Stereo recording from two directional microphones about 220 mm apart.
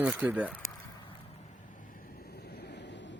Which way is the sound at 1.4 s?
35° left (ahead or behind).